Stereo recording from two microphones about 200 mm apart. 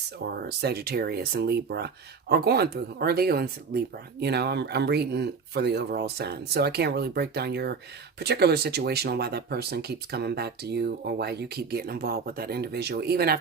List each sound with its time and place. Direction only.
0.4 s speech: 55° right (ahead or behind)